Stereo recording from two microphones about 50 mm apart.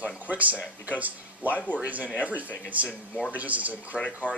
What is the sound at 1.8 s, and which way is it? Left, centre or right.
Speech, right.